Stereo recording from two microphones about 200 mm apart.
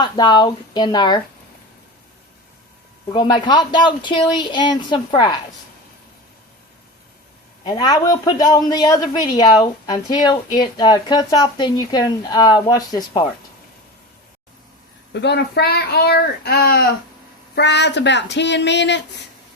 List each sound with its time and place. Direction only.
0.0 s a man's voice: 20° left (ahead or behind)
3.2 s a man's voice: 20° left (ahead or behind)
7.6 s a man's voice: 20° left (ahead or behind)
15.1 s speech: 60° left (ahead or behind)